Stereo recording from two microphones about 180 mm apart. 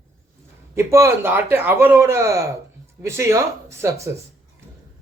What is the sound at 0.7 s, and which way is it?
A man's voice, 15° right (ahead or behind).